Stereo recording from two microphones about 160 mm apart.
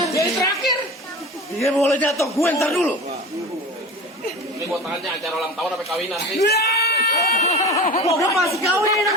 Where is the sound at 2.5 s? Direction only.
5° left (ahead or behind).